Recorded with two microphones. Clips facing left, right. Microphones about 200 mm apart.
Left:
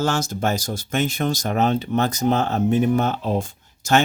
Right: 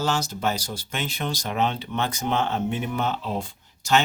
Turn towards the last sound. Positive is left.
turn(degrees=45)  # may be behind; listen again after turning